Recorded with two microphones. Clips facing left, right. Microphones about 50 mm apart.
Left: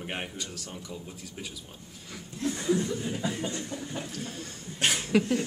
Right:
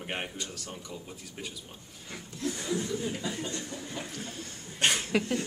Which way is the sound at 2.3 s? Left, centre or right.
Left.